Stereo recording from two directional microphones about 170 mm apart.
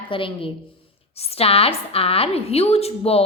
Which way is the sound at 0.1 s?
30° left (ahead or behind).